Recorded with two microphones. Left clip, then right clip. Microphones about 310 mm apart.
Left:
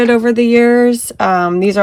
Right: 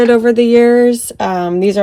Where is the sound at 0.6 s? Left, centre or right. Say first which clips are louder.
Even; left.